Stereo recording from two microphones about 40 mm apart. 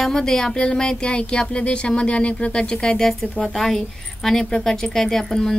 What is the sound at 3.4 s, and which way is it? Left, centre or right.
A woman's voice, centre.